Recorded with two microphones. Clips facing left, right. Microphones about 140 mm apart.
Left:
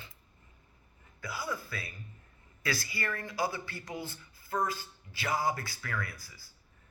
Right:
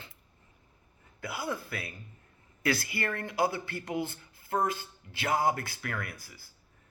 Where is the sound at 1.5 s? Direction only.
55° right (ahead or behind).